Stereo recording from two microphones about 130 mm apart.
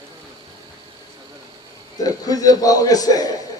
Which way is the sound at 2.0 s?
30° left (ahead or behind).